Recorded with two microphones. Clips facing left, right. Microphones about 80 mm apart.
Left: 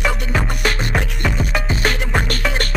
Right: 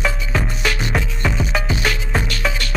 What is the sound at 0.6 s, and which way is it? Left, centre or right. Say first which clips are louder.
Music: left 1 dB; left.